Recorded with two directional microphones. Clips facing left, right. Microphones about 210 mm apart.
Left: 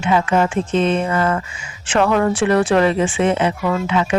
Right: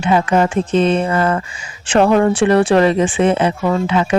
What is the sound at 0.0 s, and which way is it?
Speech, 35° right (ahead or behind).